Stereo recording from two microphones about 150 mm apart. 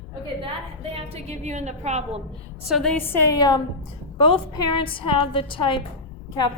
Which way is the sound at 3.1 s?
25° left (ahead or behind).